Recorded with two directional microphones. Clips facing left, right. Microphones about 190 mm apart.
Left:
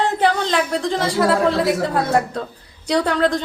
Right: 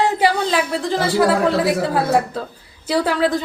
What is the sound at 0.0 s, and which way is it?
A woman's voice, 10° right (ahead or behind).